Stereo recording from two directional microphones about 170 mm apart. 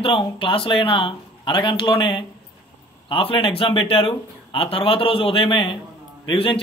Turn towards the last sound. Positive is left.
turn(degrees=30)  # may be behind; listen again after turning